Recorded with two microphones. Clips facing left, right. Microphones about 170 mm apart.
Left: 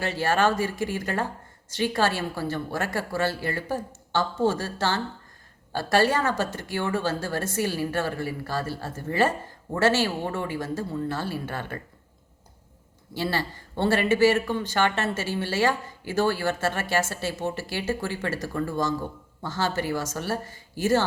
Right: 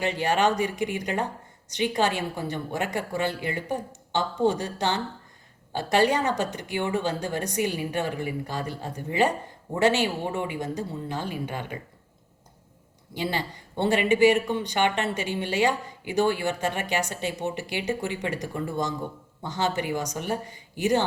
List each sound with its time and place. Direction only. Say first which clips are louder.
0.0 s a woman's voice: even; 15° right (ahead or behind)
13.1 s a woman's voice: left 1 dB; 15° right (ahead or behind)